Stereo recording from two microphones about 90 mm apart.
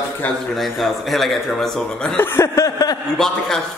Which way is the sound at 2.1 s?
25° left (ahead or behind).